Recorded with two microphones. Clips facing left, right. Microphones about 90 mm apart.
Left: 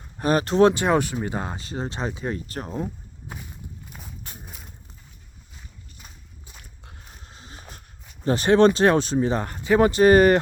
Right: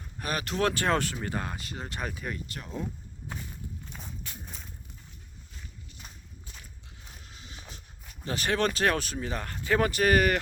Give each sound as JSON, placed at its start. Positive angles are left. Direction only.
{"t": 0.2, "sound": "speech", "side_deg": 35}
{"t": 0.7, "sound": "speech", "side_deg": 20}
{"t": 2.3, "sound": "speech", "side_deg": 40}
{"t": 3.8, "sound": "walk", "side_deg": 5}
{"t": 4.4, "sound": "a sound", "side_deg": 5}
{"t": 7.2, "sound": "a sound", "side_deg": 35}
{"t": 8.2, "sound": "speech", "side_deg": 35}